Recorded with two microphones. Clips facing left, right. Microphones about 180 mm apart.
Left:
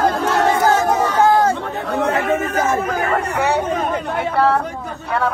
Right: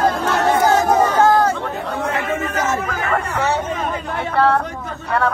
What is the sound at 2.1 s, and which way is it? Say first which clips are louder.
Speech: left 3 dB; 40° left (ahead or behind).